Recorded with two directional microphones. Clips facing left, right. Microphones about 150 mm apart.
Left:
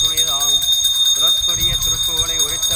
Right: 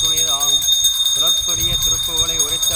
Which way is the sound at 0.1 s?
15° right (ahead or behind).